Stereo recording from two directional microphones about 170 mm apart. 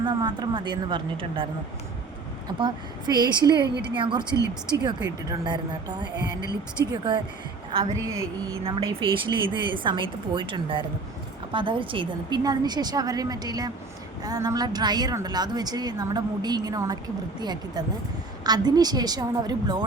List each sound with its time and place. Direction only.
0.0 s speech: 25° right (ahead or behind)
2.5 s speech: 30° right (ahead or behind)
6.0 s a woman's voice: 25° right (ahead or behind)